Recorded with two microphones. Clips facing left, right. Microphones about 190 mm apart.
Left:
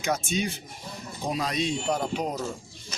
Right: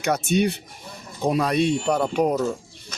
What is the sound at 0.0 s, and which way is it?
Speech, 65° right (ahead or behind).